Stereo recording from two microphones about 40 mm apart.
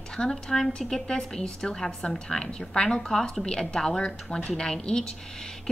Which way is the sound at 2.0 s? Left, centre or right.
Centre.